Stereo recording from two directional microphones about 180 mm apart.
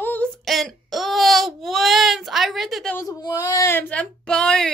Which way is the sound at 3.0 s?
20° left (ahead or behind).